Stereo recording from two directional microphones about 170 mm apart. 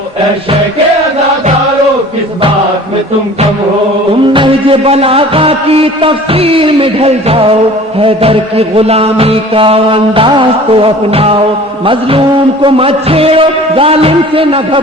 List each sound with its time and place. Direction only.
4.3 s music: 30° right (ahead or behind)